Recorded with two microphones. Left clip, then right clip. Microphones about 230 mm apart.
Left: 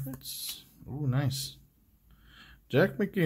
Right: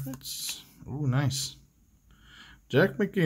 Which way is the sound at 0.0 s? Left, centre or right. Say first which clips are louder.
Right 3 dB; centre.